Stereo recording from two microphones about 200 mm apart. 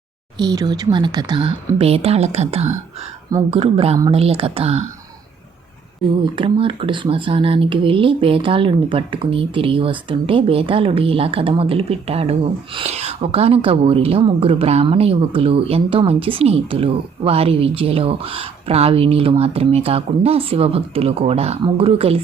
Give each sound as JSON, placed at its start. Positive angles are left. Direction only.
{"t": 0.3, "sound": "speech", "side_deg": -20}
{"t": 6.3, "sound": "speech", "side_deg": -25}